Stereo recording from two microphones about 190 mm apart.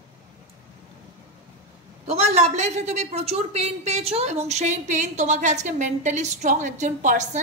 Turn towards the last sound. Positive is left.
turn(degrees=-40)  # may be behind; listen again after turning